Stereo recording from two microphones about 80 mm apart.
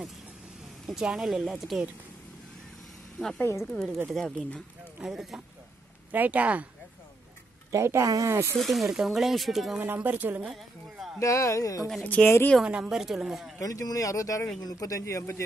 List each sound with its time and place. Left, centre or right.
0.8 s speech: centre
3.3 s speech: left
3.7 s speech: centre
4.4 s speech: centre
5.0 s speech: centre
6.1 s speech: centre
7.7 s speech: right
8.5 s speech: centre
9.8 s speech: right
10.5 s a sound: centre
11.1 s speech: left
12.0 s speech: centre
12.6 s a woman's voice: centre
13.6 s speech: left